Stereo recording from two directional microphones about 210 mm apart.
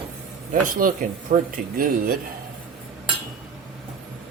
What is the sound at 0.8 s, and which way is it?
Speech, 40° right (ahead or behind).